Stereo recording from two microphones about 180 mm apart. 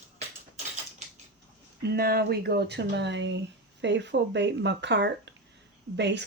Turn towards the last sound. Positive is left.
turn(degrees=-75)  # may be behind; listen again after turning